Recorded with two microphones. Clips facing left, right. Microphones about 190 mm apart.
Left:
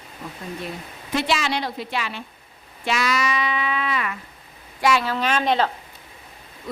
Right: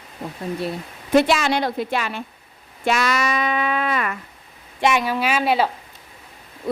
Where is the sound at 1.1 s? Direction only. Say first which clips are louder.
Right 7 dB; 50° right (ahead or behind).